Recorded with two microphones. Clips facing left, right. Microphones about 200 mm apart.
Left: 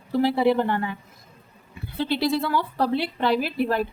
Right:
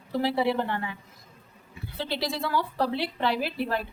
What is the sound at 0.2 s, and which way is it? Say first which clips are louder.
Speech: left 5 dB; 50° left (ahead or behind).